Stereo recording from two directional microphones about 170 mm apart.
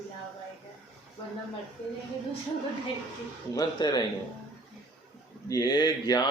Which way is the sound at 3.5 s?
25° left (ahead or behind).